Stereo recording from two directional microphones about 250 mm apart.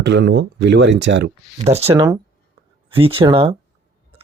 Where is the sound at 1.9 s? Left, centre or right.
Centre.